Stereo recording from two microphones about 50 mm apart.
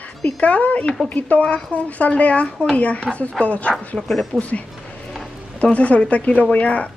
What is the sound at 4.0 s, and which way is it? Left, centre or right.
Speech, centre.